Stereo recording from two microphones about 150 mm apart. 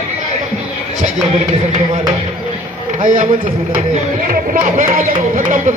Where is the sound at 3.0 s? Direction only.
60° right (ahead or behind).